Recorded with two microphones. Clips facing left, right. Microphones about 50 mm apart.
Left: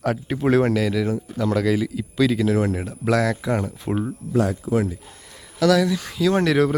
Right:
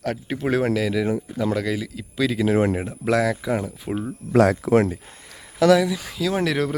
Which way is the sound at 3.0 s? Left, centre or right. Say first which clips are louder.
Even; centre.